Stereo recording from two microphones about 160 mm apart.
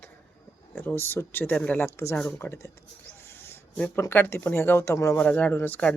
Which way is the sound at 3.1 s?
15° left (ahead or behind).